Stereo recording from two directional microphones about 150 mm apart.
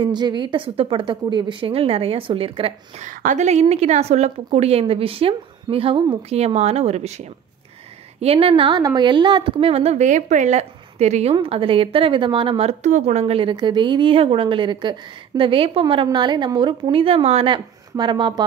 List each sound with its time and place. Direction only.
0.0 s speech: 30° right (ahead or behind)
3.1 s a woman's voice: 60° right (ahead or behind)
11.3 s speech: 40° right (ahead or behind)